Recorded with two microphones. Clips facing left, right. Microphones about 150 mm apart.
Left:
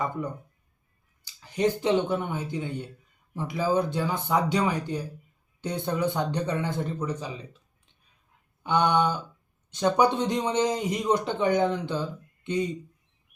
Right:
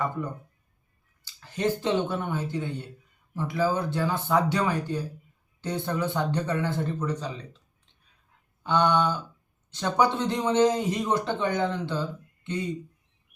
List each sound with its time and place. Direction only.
1.2 s speech: 15° left (ahead or behind)
8.6 s speech: 10° left (ahead or behind)